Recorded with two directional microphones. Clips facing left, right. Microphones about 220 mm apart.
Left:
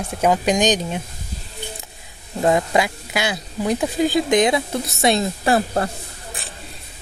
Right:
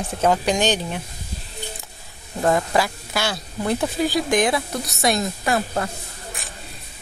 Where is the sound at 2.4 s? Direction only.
20° left (ahead or behind).